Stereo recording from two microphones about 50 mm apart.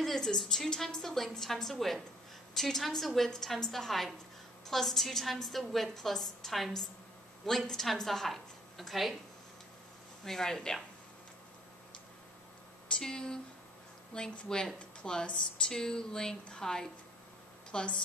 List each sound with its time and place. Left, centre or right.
0.0 s a woman's voice: centre
10.2 s a woman's voice: centre
12.9 s a woman's voice: centre